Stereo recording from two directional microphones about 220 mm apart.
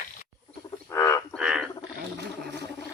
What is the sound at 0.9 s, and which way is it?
Frog, 15° left (ahead or behind).